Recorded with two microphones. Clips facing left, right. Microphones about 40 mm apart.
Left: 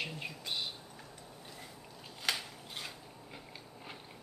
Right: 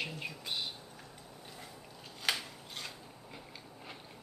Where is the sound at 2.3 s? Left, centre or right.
Centre.